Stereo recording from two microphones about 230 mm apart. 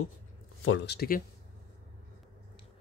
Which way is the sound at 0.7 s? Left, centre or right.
Left.